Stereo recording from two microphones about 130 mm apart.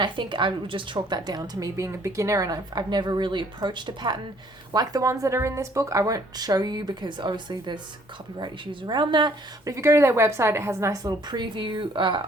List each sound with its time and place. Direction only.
0.0 s a woman's voice: 35° right (ahead or behind)
8.9 s a woman's voice: 35° right (ahead or behind)
9.7 s speech: 20° right (ahead or behind)
11.3 s a woman's voice: 35° right (ahead or behind)